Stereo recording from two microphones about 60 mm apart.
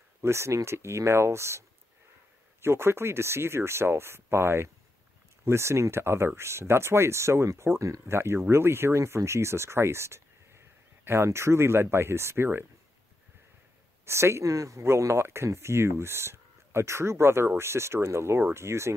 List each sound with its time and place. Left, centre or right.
0.2 s speech: right
2.6 s speech: right
14.0 s speech: right
14.9 s speech: right